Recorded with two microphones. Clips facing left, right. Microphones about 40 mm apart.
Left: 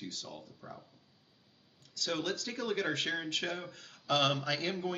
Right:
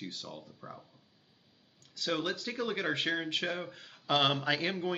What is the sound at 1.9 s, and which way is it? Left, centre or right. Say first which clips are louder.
Speech: right 2 dB; right.